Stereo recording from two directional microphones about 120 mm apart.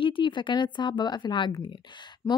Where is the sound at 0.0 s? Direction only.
45° left (ahead or behind).